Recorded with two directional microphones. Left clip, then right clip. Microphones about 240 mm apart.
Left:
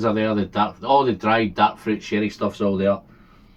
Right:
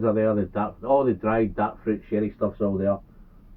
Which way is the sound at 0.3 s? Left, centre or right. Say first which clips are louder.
Left 3 dB; left.